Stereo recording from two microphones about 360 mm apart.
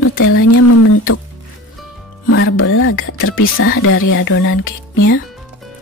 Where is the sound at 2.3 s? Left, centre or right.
Left.